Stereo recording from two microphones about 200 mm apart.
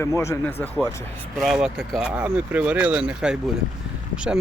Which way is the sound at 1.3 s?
Centre (ahead or behind).